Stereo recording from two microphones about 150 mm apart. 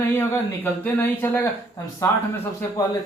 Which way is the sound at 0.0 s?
15° left (ahead or behind).